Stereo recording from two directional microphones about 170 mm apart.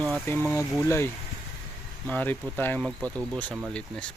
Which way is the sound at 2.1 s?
10° left (ahead or behind).